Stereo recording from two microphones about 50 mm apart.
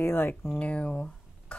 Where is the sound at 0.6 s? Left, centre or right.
Left.